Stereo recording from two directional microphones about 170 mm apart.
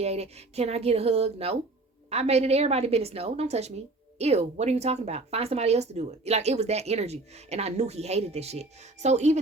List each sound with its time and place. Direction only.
0.0 s speech: 40° right (ahead or behind)